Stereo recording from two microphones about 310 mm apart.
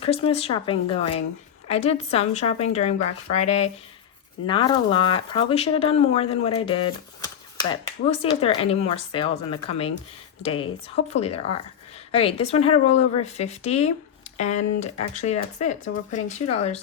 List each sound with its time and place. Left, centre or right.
0.0 s speech: centre